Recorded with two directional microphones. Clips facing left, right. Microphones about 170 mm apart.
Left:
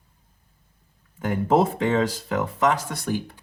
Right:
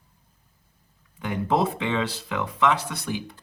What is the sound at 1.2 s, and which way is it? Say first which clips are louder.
Speech: left 4 dB; 45° left (ahead or behind).